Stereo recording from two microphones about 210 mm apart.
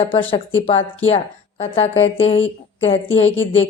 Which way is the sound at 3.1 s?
65° left (ahead or behind).